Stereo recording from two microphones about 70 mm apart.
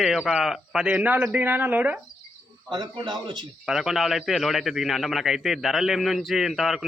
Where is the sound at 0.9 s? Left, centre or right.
Centre.